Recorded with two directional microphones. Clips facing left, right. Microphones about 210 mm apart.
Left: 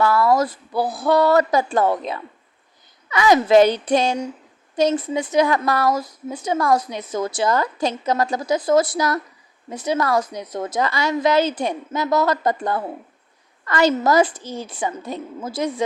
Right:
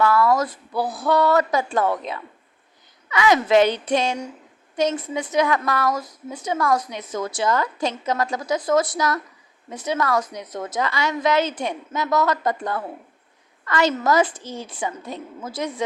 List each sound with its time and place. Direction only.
0.0 s a woman's voice: 35° left (ahead or behind)